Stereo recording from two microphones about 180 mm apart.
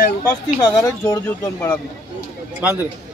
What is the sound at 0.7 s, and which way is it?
Speech, 15° left (ahead or behind).